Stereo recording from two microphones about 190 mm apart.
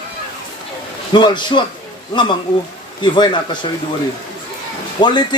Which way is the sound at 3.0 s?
25° left (ahead or behind).